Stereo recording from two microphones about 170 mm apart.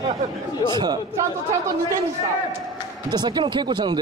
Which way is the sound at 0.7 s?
25° right (ahead or behind).